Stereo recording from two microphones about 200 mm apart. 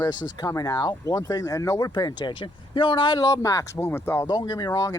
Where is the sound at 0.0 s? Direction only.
20° left (ahead or behind).